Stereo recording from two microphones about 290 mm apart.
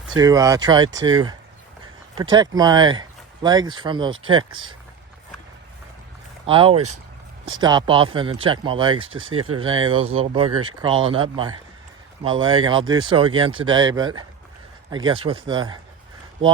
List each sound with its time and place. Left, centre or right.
0.1 s speech: centre
6.4 s speech: centre
9.3 s speech: right
9.6 s speech: centre